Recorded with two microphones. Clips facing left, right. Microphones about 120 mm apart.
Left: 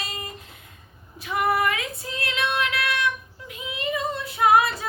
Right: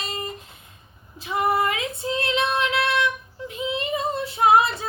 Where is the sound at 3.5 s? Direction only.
30° right (ahead or behind).